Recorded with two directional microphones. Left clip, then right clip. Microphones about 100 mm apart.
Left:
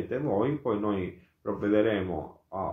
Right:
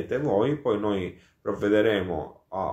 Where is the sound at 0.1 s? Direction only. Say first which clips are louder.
Right 5 dB; 25° right (ahead or behind).